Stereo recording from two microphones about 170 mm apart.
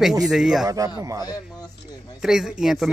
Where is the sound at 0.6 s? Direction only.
20° right (ahead or behind).